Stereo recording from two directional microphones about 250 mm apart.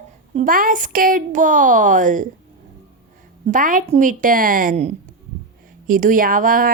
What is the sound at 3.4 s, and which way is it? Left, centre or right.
Speech, right.